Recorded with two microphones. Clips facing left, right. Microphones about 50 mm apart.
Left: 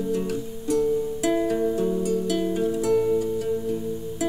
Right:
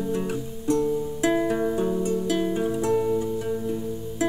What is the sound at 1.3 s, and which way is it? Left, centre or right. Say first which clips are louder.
Music: left 1 dB; centre.